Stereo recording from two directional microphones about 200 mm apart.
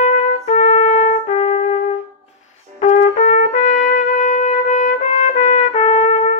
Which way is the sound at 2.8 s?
35° left (ahead or behind).